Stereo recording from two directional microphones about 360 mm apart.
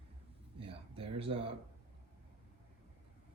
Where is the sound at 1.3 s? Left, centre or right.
Centre.